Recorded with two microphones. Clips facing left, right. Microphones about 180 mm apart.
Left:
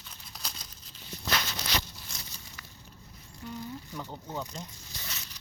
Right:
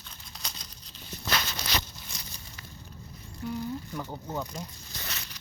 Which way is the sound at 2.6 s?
25° right (ahead or behind).